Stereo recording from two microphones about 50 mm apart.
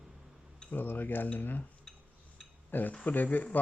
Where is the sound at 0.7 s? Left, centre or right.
Left.